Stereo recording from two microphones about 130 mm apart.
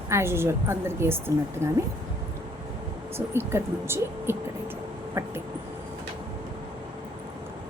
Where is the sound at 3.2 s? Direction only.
20° right (ahead or behind).